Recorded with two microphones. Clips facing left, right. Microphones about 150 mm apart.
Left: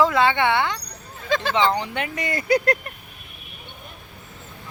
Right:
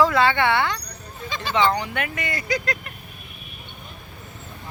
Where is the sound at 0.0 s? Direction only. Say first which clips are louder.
Even; 20° left (ahead or behind).